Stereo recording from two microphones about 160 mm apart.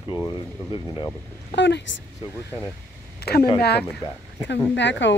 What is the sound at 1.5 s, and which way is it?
Speech, 90° left.